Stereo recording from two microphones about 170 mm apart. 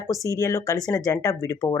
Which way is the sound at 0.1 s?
20° left (ahead or behind).